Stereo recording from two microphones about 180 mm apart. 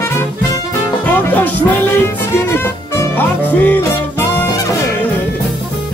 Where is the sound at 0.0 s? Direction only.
15° left (ahead or behind).